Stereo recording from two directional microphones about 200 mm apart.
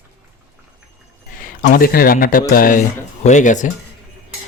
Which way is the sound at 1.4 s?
45° left (ahead or behind).